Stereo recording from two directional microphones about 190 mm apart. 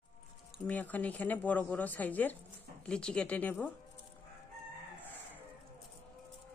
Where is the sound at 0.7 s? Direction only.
10° left (ahead or behind).